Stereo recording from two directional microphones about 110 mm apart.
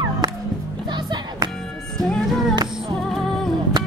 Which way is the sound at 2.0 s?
Centre (ahead or behind).